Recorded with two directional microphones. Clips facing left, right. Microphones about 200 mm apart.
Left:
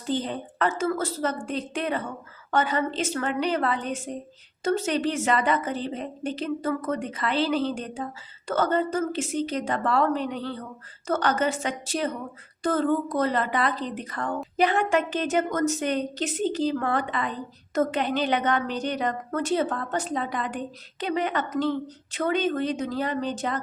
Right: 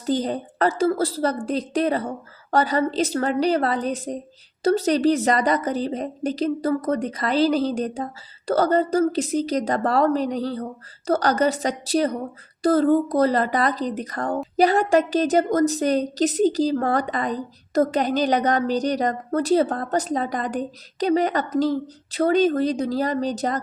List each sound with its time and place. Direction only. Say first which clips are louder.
0.0 s speech: right 5 dB; 40° right (ahead or behind)